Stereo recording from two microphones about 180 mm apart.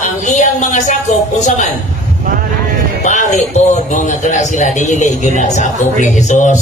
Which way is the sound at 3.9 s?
40° left (ahead or behind).